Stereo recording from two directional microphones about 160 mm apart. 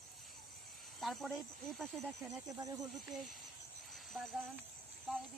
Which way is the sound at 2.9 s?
Centre (ahead or behind).